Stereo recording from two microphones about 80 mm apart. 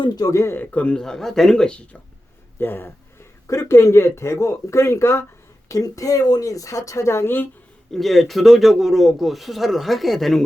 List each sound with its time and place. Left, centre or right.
0.2 s speech: left
0.5 s speech: centre
2.6 s speech: left
5.6 s speech: left
7.9 s speech: centre